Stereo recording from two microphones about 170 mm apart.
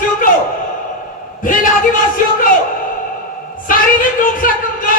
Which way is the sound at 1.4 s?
55° left (ahead or behind).